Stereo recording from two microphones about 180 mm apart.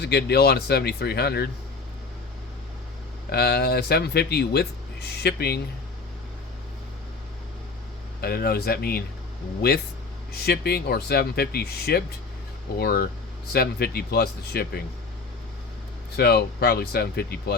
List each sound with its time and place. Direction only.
0.0 s speech: 65° left (ahead or behind)
3.3 s speech: 60° left (ahead or behind)
8.2 s speech: 60° left (ahead or behind)
16.1 s speech: 65° left (ahead or behind)